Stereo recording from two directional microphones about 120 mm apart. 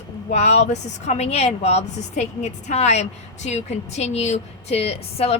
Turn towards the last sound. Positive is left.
turn(degrees=55)  # may be behind; listen again after turning